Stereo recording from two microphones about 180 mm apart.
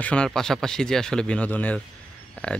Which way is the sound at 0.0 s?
5° left (ahead or behind).